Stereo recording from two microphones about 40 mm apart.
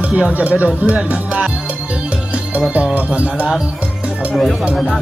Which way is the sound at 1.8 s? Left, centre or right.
Right.